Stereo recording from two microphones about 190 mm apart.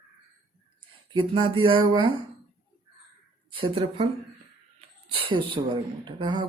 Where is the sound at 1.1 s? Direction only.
25° right (ahead or behind).